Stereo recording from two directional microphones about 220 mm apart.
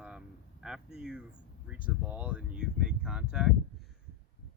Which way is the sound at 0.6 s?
Centre (ahead or behind).